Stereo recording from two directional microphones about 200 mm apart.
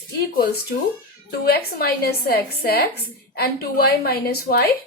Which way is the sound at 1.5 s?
50° left (ahead or behind).